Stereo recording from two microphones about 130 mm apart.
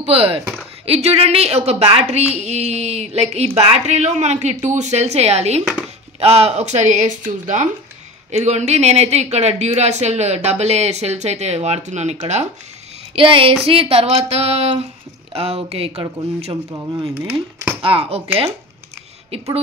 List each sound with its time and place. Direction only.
0.0 s a woman's voice: 50° right (ahead or behind)
13.1 s speech: 45° right (ahead or behind)
15.9 s speech: 30° right (ahead or behind)
17.1 s speech: 15° right (ahead or behind)
17.8 s speech: 45° right (ahead or behind)